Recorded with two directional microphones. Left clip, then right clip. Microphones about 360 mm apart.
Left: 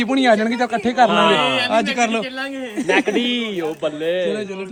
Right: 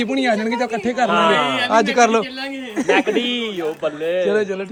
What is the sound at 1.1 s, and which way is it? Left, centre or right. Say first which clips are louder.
Speech: even; centre.